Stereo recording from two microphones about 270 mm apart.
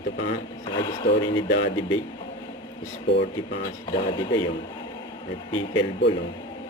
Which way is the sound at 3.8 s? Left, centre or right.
Centre.